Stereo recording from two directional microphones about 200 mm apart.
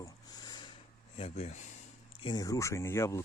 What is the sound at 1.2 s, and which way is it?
Speech, 30° left (ahead or behind).